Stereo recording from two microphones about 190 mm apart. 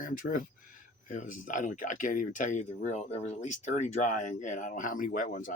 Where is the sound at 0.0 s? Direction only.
45° left (ahead or behind).